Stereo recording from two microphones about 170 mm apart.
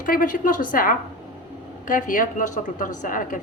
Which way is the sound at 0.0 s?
55° left (ahead or behind).